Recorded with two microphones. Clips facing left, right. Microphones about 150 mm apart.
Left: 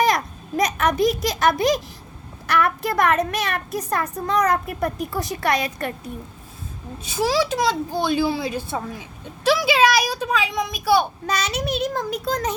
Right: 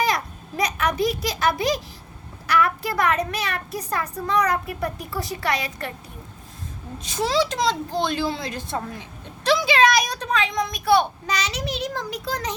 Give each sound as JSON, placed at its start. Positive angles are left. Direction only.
{"t": 0.1, "sound": "a sound", "side_deg": 45}
{"t": 2.5, "sound": "a woman's voice", "side_deg": 50}
{"t": 7.0, "sound": "a woman's voice", "side_deg": 5}
{"t": 11.3, "sound": "a woman's voice", "side_deg": 55}